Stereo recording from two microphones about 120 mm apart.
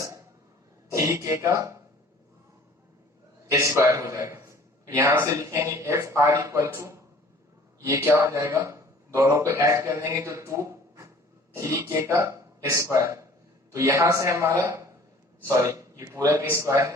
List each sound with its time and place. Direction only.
0.0 s cough: 25° right (ahead or behind)
0.9 s speech: 25° right (ahead or behind)
3.5 s a man's voice: 25° right (ahead or behind)